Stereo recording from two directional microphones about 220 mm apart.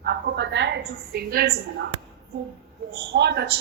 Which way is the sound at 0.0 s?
50° right (ahead or behind).